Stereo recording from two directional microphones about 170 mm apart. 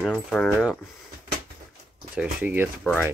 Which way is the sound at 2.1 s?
5° right (ahead or behind).